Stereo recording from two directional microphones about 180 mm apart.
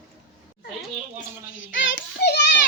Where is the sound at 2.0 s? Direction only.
70° left (ahead or behind).